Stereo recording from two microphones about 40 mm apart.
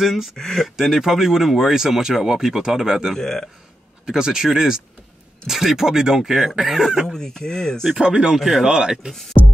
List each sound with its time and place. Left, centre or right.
0.0 s speech: centre
0.7 s speech: centre
3.2 s speech: centre
4.0 s speech: centre
7.1 s speech: centre
8.0 s speech: right